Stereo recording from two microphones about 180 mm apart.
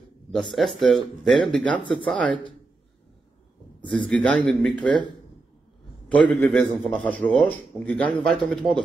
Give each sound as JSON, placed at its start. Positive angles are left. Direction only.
{"t": 0.3, "sound": "a man's voice", "side_deg": 0}
{"t": 3.9, "sound": "a man's voice", "side_deg": 5}
{"t": 6.0, "sound": "a man's voice", "side_deg": 5}